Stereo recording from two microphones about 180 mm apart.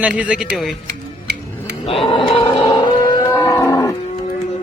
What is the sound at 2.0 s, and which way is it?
Livestock, 30° left (ahead or behind).